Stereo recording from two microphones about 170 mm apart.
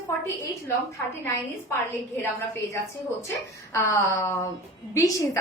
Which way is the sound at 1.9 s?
15° left (ahead or behind).